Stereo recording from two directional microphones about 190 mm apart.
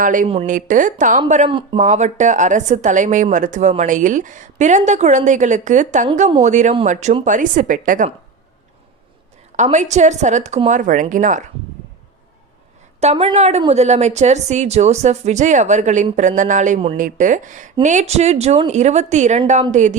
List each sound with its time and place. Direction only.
0.0 s a woman's voice: 45° right (ahead or behind)
1.5 s speech: 25° right (ahead or behind)
1.8 s a woman's voice: 40° right (ahead or behind)
9.6 s a woman's voice: 40° right (ahead or behind)
13.0 s a woman's voice: 30° right (ahead or behind)